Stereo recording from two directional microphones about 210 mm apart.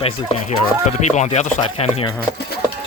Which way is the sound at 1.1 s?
35° left (ahead or behind).